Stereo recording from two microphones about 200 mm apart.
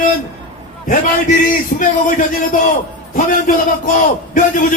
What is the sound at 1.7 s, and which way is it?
Speech, 40° left (ahead or behind).